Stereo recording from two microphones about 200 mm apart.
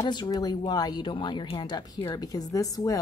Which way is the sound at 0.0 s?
20° left (ahead or behind).